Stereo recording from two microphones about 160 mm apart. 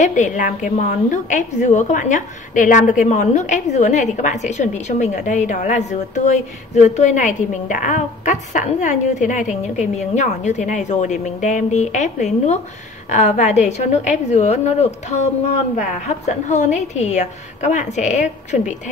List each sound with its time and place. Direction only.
0.0 s a woman's voice: 50° left (ahead or behind)